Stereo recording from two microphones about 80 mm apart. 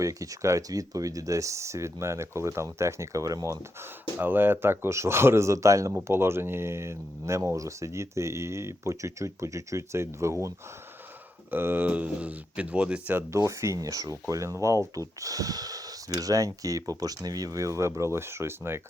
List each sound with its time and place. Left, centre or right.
0.0 s speech: right
4.2 s speech: right
11.5 s speech: right
13.3 s speech: right